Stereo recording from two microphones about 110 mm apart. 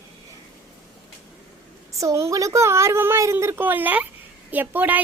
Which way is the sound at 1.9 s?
25° right (ahead or behind).